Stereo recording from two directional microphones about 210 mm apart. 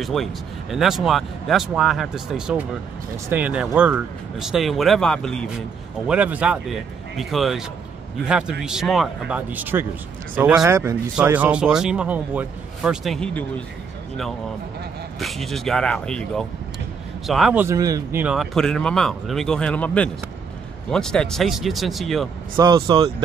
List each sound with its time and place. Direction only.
0.0 s speech: centre (ahead or behind)
15.1 s speech: centre (ahead or behind)
17.6 s speech: 15° right (ahead or behind); by 22.3 s centre (ahead or behind)
22.6 s speech: 20° right (ahead or behind)